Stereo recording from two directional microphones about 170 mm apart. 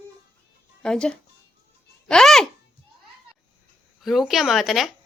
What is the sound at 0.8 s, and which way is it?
Speech, 5° left (ahead or behind).